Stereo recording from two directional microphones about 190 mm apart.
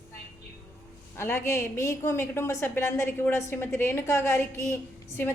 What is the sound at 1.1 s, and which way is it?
A woman's voice, 10° left (ahead or behind).